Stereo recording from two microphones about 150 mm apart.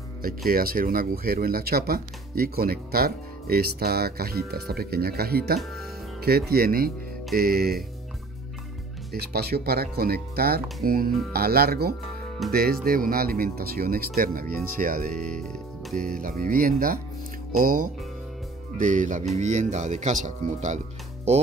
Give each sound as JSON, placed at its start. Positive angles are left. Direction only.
{"t": 0.5, "sound": "speech", "side_deg": -75}
{"t": 9.1, "sound": "speech", "side_deg": -90}
{"t": 12.4, "sound": "speech", "side_deg": 0}
{"t": 12.8, "sound": "speech", "side_deg": -75}
{"t": 15.1, "sound": "speech", "side_deg": 5}
{"t": 16.2, "sound": "speech", "side_deg": -70}
{"t": 18.8, "sound": "music", "side_deg": -55}
{"t": 19.3, "sound": "speech", "side_deg": -50}